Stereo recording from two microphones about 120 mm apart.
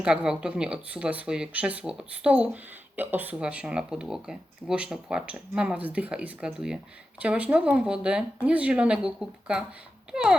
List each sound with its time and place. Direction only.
0.0 s speech: 5° right (ahead or behind)